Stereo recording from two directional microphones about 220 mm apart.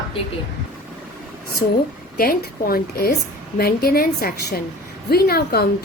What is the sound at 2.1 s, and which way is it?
A woman's voice, 45° left (ahead or behind).